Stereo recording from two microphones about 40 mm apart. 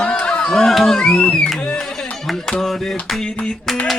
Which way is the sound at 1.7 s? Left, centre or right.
Centre.